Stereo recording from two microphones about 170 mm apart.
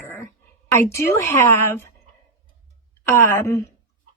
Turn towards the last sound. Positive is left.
turn(degrees=15)  # may be behind; listen again after turning